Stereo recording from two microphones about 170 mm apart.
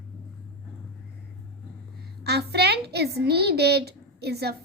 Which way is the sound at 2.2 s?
75° right (ahead or behind).